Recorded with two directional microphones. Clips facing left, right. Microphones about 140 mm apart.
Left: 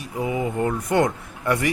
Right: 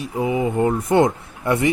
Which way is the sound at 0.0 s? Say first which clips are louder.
Right 4 dB; 25° right (ahead or behind).